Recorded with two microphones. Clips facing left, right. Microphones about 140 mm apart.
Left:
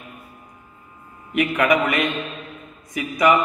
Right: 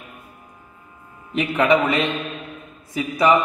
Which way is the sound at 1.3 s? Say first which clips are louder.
Right 1 dB; 25° right (ahead or behind).